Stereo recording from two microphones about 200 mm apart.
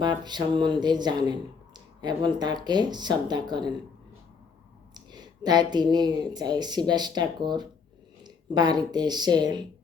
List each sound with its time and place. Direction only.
0.0 s speech: 20° right (ahead or behind)
4.9 s speech: 20° right (ahead or behind)